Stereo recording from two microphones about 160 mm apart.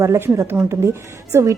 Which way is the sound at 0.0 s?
15° right (ahead or behind).